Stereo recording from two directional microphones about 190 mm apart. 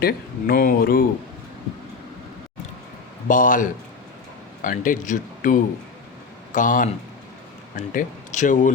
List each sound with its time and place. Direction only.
0.0 s speech: 50° left (ahead or behind)
3.2 s speech: 45° left (ahead or behind)